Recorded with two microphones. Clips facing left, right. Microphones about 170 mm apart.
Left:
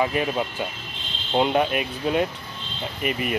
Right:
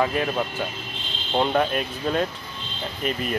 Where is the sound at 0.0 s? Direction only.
5° left (ahead or behind).